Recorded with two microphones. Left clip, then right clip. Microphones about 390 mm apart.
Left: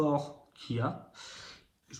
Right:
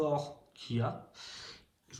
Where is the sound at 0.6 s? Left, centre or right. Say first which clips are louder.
Left 2 dB; centre.